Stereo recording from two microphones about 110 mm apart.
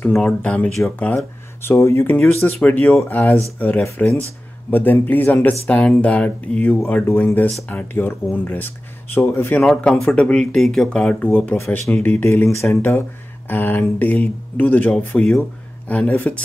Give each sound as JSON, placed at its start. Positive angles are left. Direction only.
{"t": 0.0, "sound": "speech", "side_deg": 10}
{"t": 9.6, "sound": "speech", "side_deg": 5}